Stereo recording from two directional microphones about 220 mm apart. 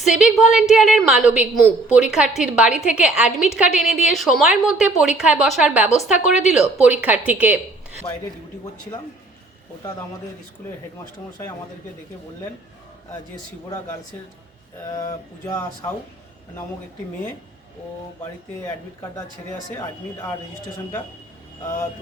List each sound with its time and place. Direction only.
0.1 s a woman's voice: 5° right (ahead or behind)
14.8 s speech: 15° left (ahead or behind)